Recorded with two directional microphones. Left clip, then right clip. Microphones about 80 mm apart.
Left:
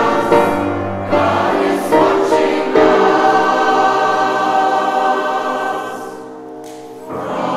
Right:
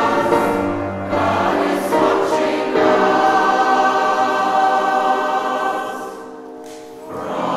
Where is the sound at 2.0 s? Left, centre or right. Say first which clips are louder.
Left 3 dB; centre.